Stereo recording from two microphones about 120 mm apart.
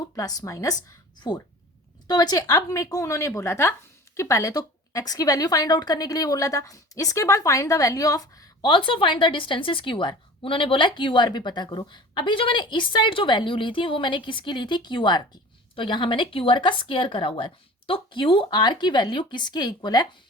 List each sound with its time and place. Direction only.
0.2 s speech: 30° left (ahead or behind)
2.0 s speech: 35° left (ahead or behind)
8.6 s a woman's voice: 45° left (ahead or behind)